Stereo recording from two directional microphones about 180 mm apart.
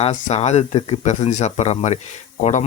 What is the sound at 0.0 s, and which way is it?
Speech, 40° left (ahead or behind).